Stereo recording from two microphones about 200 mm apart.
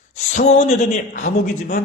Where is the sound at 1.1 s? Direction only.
40° left (ahead or behind).